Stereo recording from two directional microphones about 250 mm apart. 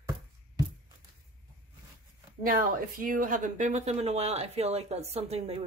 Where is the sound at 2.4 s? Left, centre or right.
Right.